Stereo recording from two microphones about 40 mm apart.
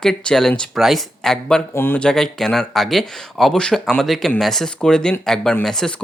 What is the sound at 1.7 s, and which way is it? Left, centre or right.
Speech, left.